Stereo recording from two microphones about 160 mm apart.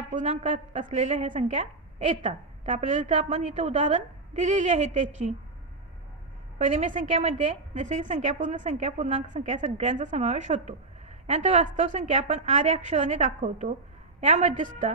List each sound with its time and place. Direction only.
0.1 s a woman's voice: 45° right (ahead or behind)
6.6 s a woman's voice: 50° right (ahead or behind)